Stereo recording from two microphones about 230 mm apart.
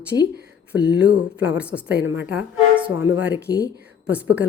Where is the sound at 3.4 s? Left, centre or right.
Right.